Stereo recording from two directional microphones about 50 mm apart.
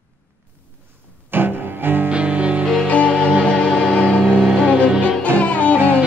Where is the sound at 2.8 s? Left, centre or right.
Left.